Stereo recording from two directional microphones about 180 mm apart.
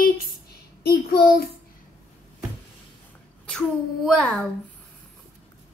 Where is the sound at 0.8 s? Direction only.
60° left (ahead or behind).